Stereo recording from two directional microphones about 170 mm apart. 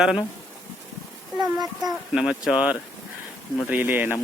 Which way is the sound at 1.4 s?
20° right (ahead or behind).